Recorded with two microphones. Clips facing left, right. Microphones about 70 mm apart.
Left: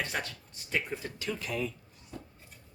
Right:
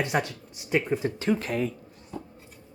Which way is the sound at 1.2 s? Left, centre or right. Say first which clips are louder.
Right 6 dB; right.